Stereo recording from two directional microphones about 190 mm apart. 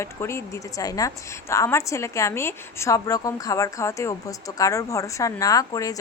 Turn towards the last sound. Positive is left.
turn(degrees=20)  # may be behind; listen again after turning